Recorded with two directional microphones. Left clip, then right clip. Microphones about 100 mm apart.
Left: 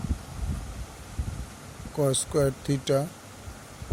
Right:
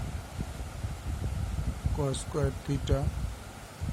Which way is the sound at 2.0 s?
50° left (ahead or behind).